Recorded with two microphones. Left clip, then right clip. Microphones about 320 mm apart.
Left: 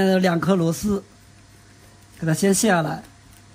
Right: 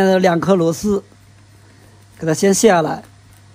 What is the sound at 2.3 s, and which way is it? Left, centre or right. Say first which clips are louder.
Speech: right 8 dB; right.